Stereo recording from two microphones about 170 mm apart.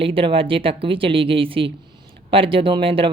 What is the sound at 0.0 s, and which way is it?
Speech, 30° right (ahead or behind).